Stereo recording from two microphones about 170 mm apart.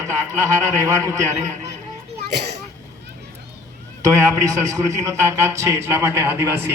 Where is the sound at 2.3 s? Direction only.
75° right (ahead or behind).